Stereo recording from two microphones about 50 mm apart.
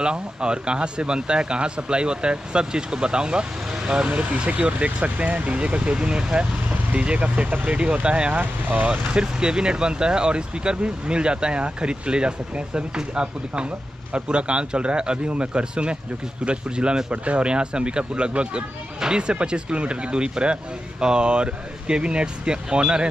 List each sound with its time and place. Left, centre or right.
0.0 s speech: centre
8.4 s speech: right
8.8 s speech: right